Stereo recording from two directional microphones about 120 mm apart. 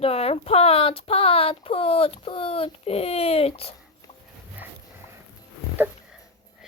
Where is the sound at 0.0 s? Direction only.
55° left (ahead or behind).